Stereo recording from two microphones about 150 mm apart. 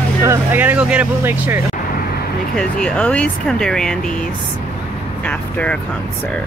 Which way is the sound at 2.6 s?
5° left (ahead or behind).